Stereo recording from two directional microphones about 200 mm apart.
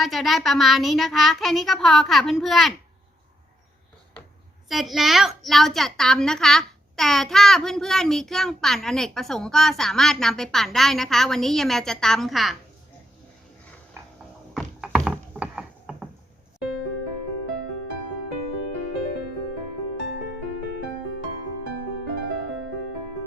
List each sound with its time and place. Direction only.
0.0 s a woman's voice: centre (ahead or behind)
4.7 s a woman's voice: centre (ahead or behind)
14.5 s a sound: centre (ahead or behind)
15.3 s pulleys: 5° right (ahead or behind)
20.1 s music: 60° left (ahead or behind)